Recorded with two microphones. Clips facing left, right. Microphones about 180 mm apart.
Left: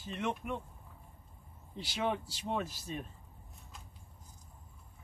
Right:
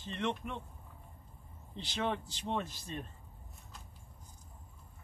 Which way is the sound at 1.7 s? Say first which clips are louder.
Left 1 dB; 10° left (ahead or behind).